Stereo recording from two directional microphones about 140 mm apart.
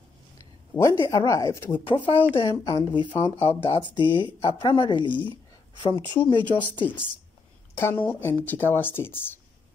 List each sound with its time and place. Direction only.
0.4 s speech: 20° left (ahead or behind)
2.0 s speech: 35° left (ahead or behind)
7.7 s speech: 15° left (ahead or behind)